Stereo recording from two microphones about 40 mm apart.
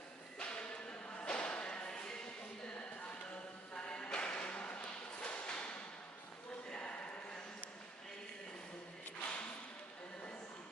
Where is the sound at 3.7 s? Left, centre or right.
Left.